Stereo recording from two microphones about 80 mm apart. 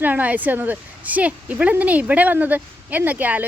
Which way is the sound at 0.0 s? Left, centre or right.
Right.